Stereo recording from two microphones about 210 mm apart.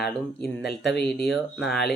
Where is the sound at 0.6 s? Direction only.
50° left (ahead or behind).